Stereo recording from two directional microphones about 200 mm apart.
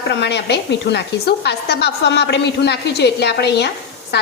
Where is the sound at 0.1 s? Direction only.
60° left (ahead or behind).